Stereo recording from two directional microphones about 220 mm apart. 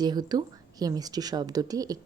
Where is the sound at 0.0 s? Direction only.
20° right (ahead or behind).